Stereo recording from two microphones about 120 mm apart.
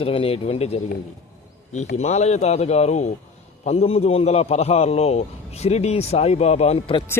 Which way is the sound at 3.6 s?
60° left (ahead or behind).